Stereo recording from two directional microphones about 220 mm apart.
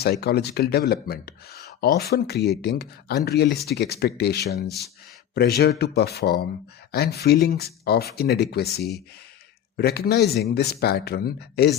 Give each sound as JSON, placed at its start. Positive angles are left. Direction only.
{"t": 0.0, "sound": "speech", "side_deg": 45}